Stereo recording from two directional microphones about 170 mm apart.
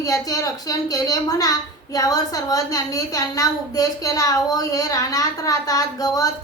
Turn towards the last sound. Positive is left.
turn(degrees=20)  # may be behind; listen again after turning